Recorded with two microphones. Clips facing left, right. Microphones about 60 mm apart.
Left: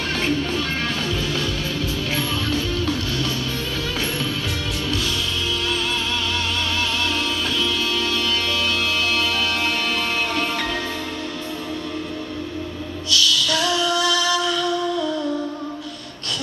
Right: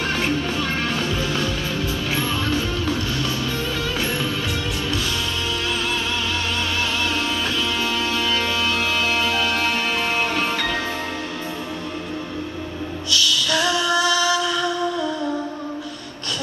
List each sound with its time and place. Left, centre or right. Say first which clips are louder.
0.2 s music: even; right
7.6 s music: even; right
13.1 s music: left 1 dB; right